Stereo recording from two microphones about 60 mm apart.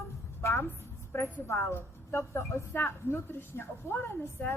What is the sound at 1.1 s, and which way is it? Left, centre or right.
A woman's voice, left.